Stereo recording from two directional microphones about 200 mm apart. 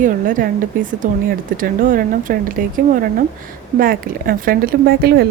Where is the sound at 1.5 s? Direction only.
45° right (ahead or behind).